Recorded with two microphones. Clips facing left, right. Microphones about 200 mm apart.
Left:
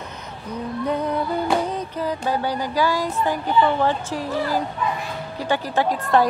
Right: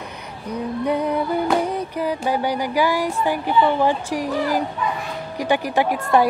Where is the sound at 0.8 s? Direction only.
10° right (ahead or behind).